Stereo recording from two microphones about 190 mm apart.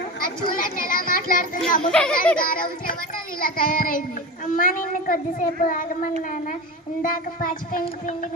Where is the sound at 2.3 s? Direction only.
50° left (ahead or behind).